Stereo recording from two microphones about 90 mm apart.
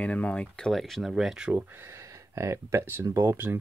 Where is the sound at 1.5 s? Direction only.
30° right (ahead or behind).